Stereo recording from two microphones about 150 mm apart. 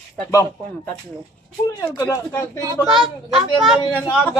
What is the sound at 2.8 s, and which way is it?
A woman's voice, centre (ahead or behind).